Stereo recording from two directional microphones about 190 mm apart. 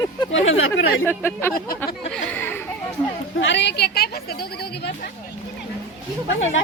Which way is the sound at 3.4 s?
70° left (ahead or behind).